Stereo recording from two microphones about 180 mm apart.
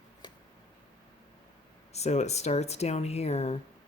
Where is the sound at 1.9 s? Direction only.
35° left (ahead or behind).